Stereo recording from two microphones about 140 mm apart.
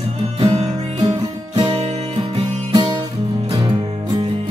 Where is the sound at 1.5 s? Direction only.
35° right (ahead or behind).